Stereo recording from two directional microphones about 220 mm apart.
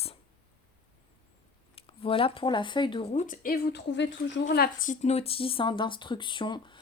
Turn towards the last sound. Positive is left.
turn(degrees=20)  # may be behind; listen again after turning